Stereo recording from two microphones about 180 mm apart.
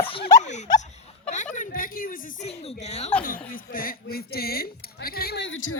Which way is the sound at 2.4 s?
35° left (ahead or behind).